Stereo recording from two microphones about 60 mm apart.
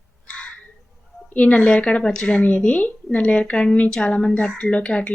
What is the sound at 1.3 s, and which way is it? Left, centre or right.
Speech, left.